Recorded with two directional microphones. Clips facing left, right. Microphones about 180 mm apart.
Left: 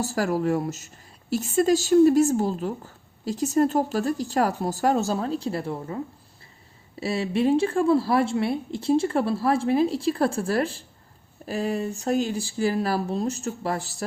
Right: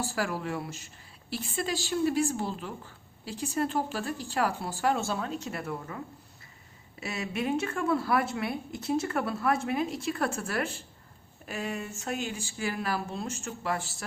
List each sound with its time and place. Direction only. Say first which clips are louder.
0.0 s speech: left 8 dB; 40° left (ahead or behind)
7.0 s speech: left 9 dB; 30° left (ahead or behind)